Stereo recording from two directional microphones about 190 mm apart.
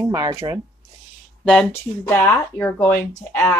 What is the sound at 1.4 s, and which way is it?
Speech, 5° left (ahead or behind).